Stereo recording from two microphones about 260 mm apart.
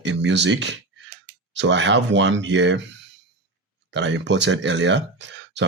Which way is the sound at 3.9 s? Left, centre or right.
Right.